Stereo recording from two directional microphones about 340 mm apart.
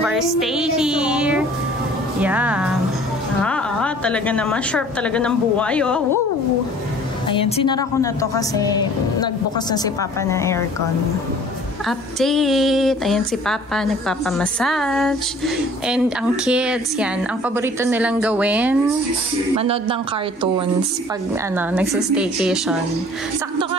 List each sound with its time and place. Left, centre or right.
0.0 s music: centre
2.2 s a woman's voice: centre
7.2 s a woman's voice: centre
10.2 s a woman's voice: centre
12.2 s a woman's voice: centre
19.5 s a woman's voice: centre
21.5 s a woman's voice: centre